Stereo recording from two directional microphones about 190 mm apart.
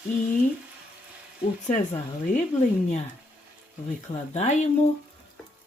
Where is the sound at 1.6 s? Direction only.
40° left (ahead or behind).